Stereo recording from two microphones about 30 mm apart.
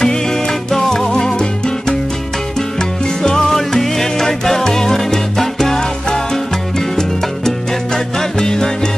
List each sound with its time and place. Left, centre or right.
0.0 s music: centre
3.2 s music: centre